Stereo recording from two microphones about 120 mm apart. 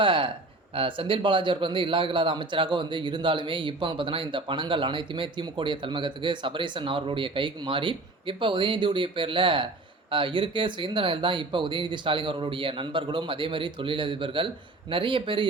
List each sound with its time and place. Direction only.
0.0 s a man's voice: 45° right (ahead or behind)